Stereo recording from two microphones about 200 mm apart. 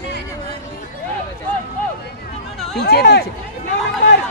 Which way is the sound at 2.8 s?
50° left (ahead or behind).